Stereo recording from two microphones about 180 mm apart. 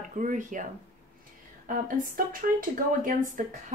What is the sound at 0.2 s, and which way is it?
Speech, 45° right (ahead or behind).